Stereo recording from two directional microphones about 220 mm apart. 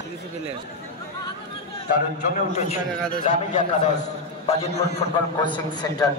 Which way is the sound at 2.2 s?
35° left (ahead or behind).